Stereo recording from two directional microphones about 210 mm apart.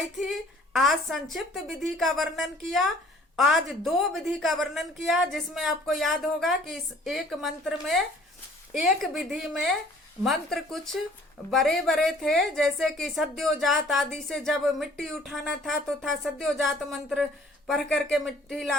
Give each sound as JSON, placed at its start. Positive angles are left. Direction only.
{"t": 0.3, "sound": "a woman's voice", "side_deg": 0}